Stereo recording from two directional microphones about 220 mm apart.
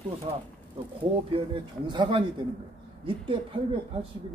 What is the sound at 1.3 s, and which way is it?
Speech, 20° right (ahead or behind).